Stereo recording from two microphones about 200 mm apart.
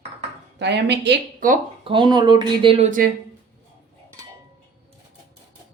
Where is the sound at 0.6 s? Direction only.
60° right (ahead or behind).